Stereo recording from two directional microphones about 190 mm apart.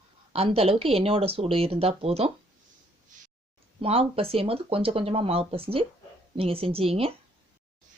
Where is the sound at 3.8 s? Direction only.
30° right (ahead or behind).